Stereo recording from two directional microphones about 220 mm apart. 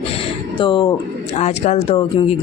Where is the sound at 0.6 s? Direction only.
20° left (ahead or behind).